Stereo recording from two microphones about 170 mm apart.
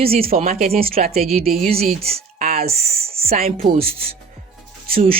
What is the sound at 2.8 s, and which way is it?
Speech, 35° right (ahead or behind).